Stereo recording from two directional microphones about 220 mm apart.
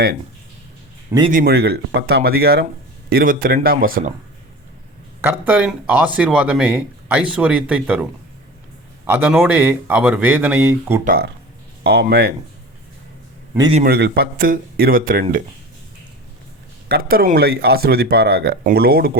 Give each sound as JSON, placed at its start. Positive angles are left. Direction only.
{"t": 1.3, "sound": "speech", "side_deg": -45}
{"t": 5.2, "sound": "speech", "side_deg": -10}
{"t": 9.0, "sound": "speech", "side_deg": -10}
{"t": 11.0, "sound": "speech", "side_deg": -45}
{"t": 13.8, "sound": "speech", "side_deg": -45}
{"t": 16.9, "sound": "speech", "side_deg": -45}